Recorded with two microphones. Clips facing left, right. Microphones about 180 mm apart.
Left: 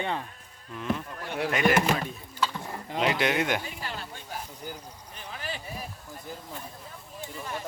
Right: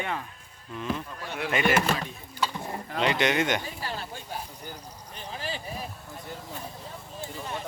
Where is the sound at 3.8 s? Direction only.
35° right (ahead or behind).